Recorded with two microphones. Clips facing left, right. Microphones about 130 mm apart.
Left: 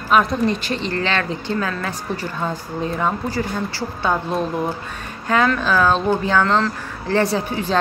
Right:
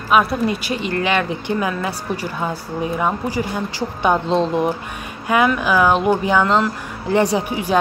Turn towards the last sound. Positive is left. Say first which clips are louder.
# right 2 dB
turn(degrees=-15)  # may be behind; listen again after turning